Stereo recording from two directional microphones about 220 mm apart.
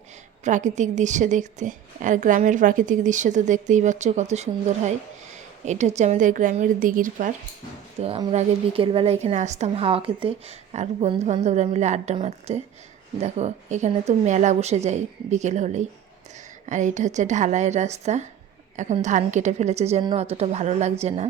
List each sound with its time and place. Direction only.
0.4 s a woman's voice: 35° right (ahead or behind)
8.0 s a woman's voice: 25° right (ahead or behind)